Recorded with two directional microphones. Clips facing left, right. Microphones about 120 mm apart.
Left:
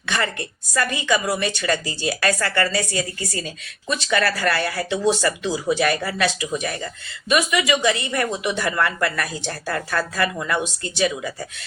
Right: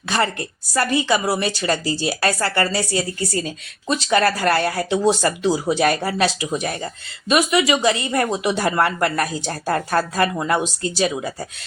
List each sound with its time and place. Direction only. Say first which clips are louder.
0.0 s a woman's voice: right 4 dB; 35° right (ahead or behind)